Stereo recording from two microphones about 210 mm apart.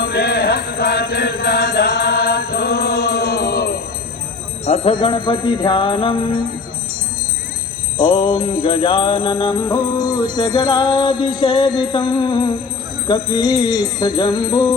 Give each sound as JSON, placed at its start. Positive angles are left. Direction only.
{"t": 0.0, "sound": "music", "side_deg": 50}
{"t": 4.6, "sound": "music", "side_deg": 30}
{"t": 7.9, "sound": "music", "side_deg": 20}